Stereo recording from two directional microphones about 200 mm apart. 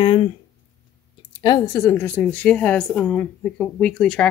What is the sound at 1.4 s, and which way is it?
A woman's voice, 20° left (ahead or behind).